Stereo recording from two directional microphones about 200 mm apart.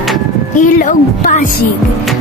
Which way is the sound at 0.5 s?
40° left (ahead or behind).